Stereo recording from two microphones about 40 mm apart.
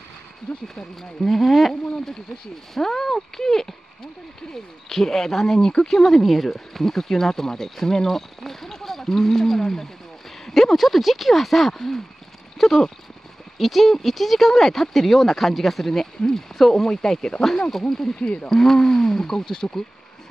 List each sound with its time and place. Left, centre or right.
1.3 s speech: centre
2.7 s speech: centre
4.8 s speech: centre